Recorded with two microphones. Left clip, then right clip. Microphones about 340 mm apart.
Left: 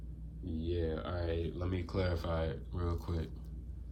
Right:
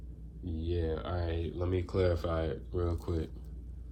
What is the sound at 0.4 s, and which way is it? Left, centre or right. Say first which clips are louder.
Speech: right 2 dB; centre.